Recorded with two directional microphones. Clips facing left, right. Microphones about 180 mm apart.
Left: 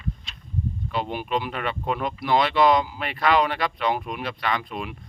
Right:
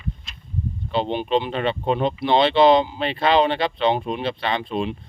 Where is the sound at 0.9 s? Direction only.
25° right (ahead or behind).